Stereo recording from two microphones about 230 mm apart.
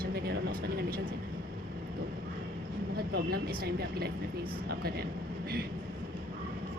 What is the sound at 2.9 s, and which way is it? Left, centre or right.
Vehicle, right.